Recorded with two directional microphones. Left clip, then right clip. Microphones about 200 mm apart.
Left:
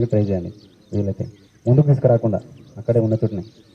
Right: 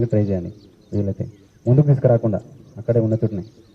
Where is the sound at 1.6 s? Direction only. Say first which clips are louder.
Even; 20° left (ahead or behind).